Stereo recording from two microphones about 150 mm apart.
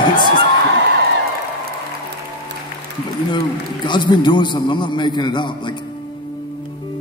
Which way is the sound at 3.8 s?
30° left (ahead or behind).